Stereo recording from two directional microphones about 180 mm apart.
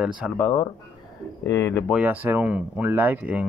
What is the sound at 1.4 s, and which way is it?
Speech, 15° left (ahead or behind).